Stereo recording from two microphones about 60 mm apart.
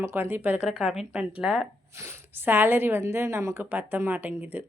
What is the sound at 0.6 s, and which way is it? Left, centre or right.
Speech, centre.